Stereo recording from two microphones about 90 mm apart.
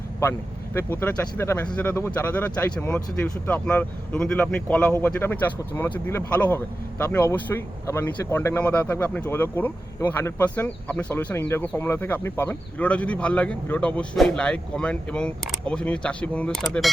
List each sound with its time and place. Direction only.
0.2 s speech: 30° left (ahead or behind); by 4.9 s 10° left (ahead or behind)
4.9 s speech: 25° left (ahead or behind)
7.9 s speech: 30° left (ahead or behind); by 16.9 s 5° left (ahead or behind)